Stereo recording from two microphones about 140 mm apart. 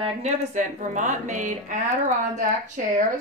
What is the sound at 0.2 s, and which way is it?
Speech, 60° right (ahead or behind).